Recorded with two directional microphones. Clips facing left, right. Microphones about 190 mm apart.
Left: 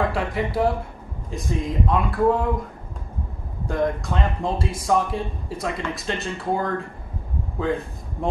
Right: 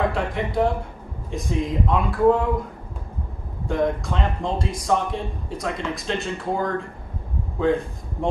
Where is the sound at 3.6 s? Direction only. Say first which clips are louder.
Right 1 dB; centre (ahead or behind).